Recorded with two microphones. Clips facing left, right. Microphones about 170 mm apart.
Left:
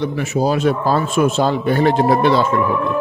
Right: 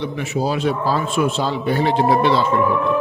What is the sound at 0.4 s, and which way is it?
Speech, 45° left (ahead or behind).